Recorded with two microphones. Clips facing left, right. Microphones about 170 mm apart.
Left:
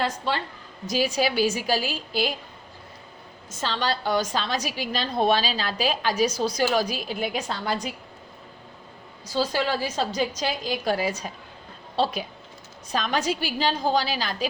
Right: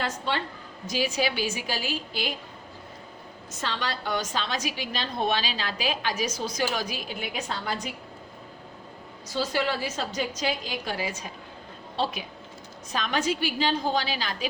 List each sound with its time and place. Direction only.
0.9 s a woman's voice: 35° left (ahead or behind)
3.6 s a woman's voice: 35° left (ahead or behind)
9.3 s a woman's voice: 35° left (ahead or behind)
12.9 s a woman's voice: 35° left (ahead or behind)